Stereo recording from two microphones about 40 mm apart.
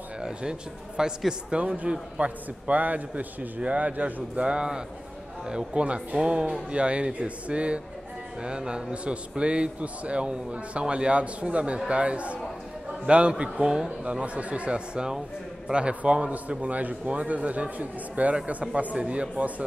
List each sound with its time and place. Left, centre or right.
0.2 s speech: centre
1.5 s a man's voice: right
5.5 s a man's voice: centre
6.2 s a man's voice: right